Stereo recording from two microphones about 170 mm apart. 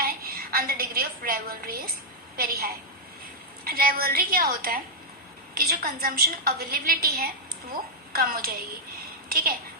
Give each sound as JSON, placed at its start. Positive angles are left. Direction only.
{"t": 0.0, "sound": "a woman's voice", "side_deg": -60}